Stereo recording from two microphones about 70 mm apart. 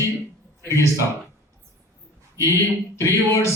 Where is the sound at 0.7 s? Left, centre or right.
Left.